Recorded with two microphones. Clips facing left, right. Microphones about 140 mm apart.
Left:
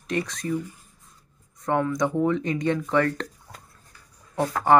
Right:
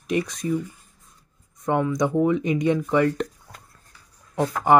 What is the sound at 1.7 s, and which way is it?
Speech, 10° right (ahead or behind).